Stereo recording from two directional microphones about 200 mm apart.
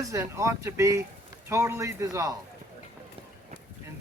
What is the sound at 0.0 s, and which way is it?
Speech, 15° right (ahead or behind).